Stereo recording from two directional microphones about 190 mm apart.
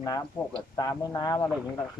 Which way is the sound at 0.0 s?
20° left (ahead or behind).